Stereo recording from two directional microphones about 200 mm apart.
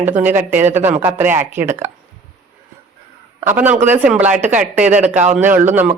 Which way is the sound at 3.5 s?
10° right (ahead or behind).